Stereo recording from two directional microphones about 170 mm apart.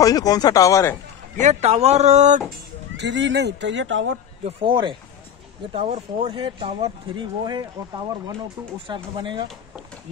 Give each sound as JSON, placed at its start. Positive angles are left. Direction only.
{"t": 0.0, "sound": "speech", "side_deg": 20}
{"t": 1.3, "sound": "speech", "side_deg": -45}
{"t": 3.0, "sound": "speech", "side_deg": -90}
{"t": 4.5, "sound": "speech", "side_deg": -30}
{"t": 8.9, "sound": "speech", "side_deg": -25}